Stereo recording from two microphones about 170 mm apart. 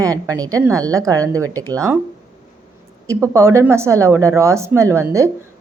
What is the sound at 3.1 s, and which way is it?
Speech, 15° right (ahead or behind).